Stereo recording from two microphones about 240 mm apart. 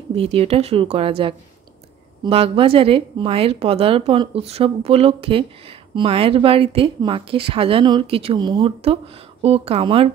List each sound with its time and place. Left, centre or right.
0.1 s a woman's voice: right